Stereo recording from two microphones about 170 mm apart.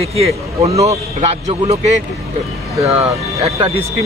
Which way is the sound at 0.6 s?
35° right (ahead or behind).